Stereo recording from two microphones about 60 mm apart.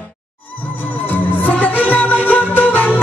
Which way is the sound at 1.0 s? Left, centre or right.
Left.